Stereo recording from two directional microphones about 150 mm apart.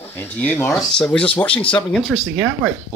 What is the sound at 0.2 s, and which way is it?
Speech, 10° left (ahead or behind).